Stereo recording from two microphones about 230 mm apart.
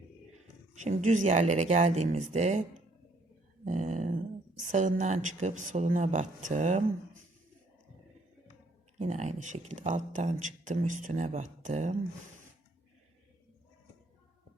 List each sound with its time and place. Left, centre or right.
0.8 s speech: right
3.6 s a sound: right
4.6 s speech: right
9.0 s speech: right